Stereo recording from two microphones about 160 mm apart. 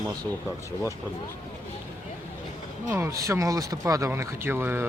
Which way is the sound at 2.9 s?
15° right (ahead or behind).